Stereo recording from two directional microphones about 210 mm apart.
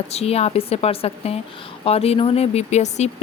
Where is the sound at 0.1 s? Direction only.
30° left (ahead or behind).